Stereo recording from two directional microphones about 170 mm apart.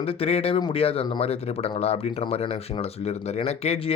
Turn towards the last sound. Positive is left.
turn(degrees=40)  # may be behind; listen again after turning